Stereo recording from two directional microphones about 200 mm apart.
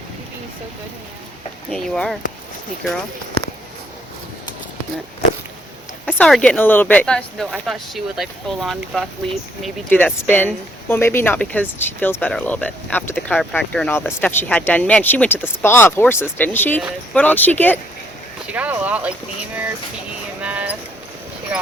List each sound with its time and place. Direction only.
1.7 s speech: 5° left (ahead or behind)
6.1 s speech: 5° left (ahead or behind)
18.4 s speech: 5° right (ahead or behind)
20.4 s clip-clop: 5° right (ahead or behind)